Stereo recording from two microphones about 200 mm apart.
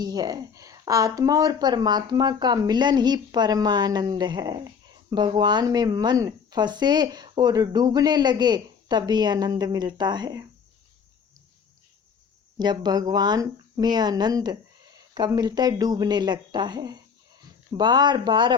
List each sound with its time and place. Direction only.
0.0 s speech: 20° right (ahead or behind)
12.5 s speech: 20° right (ahead or behind)